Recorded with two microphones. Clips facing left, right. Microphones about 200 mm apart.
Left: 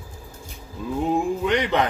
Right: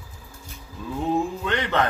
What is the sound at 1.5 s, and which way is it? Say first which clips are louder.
Speech: left 3 dB; 15° left (ahead or behind).